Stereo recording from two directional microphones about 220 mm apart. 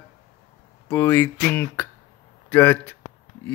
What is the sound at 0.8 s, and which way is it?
Speech, 10° left (ahead or behind).